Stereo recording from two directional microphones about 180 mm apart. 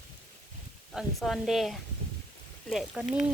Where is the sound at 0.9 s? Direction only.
Centre (ahead or behind).